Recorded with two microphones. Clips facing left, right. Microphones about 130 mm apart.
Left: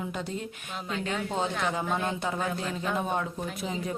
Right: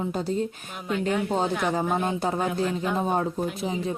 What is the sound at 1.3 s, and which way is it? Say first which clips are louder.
Speech: right 4 dB; 40° right (ahead or behind).